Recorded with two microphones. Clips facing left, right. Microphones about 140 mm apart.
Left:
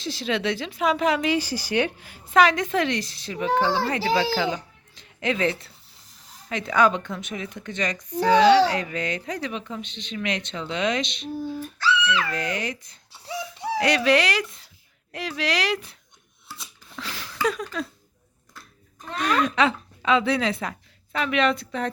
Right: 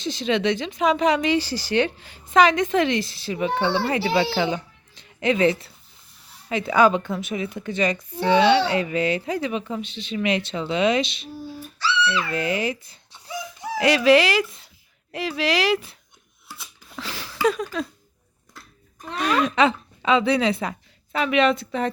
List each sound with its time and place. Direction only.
0.0 s speech: centre (ahead or behind)
3.5 s speech: 40° left (ahead or behind)
3.8 s speech: 10° right (ahead or behind)
4.4 s a sound: centre (ahead or behind)
6.5 s speech: 5° right (ahead or behind)
8.2 s speech: 40° left (ahead or behind)
8.7 s speech: 5° right (ahead or behind)
12.3 s speech: 5° right (ahead or behind)
13.2 s a sound: 30° left (ahead or behind)
13.7 s speech: 5° right (ahead or behind)
16.6 s a sound: 5° right (ahead or behind)
19.2 s speech: centre (ahead or behind)